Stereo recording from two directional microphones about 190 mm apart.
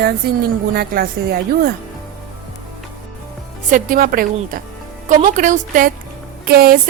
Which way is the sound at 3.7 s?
50° right (ahead or behind).